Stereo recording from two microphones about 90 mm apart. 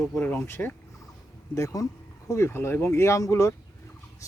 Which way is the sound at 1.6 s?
40° left (ahead or behind).